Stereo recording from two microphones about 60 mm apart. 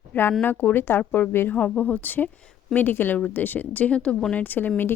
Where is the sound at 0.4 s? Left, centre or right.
Left; by 4.4 s centre.